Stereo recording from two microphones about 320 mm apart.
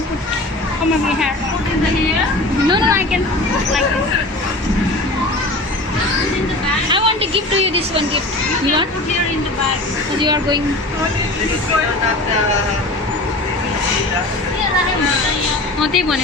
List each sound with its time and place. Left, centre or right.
2.6 s speech: centre
6.9 s a woman's voice: centre
10.2 s speech: centre
15.8 s a woman's voice: centre